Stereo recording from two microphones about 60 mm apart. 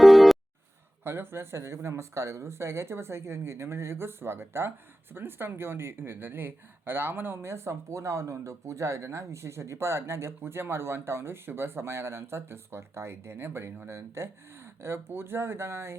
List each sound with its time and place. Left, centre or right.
0.0 s music: centre
1.0 s speech: right